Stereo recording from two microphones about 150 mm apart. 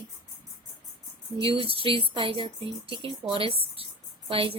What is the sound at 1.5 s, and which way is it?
Speech, 35° right (ahead or behind).